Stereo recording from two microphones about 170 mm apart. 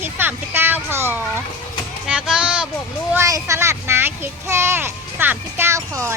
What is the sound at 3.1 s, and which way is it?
A child's voice, 20° right (ahead or behind).